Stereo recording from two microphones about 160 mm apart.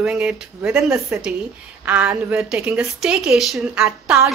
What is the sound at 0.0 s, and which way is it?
A woman's voice, 10° right (ahead or behind).